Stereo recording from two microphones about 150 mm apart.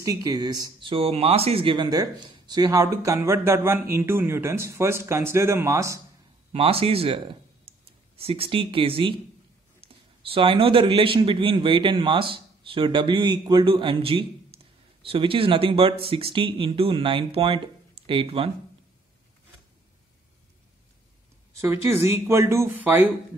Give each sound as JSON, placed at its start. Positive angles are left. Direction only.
{"t": 0.0, "sound": "speech", "side_deg": -25}
{"t": 6.5, "sound": "speech", "side_deg": -40}
{"t": 8.2, "sound": "speech", "side_deg": -40}
{"t": 10.2, "sound": "speech", "side_deg": -35}
{"t": 21.5, "sound": "speech", "side_deg": -15}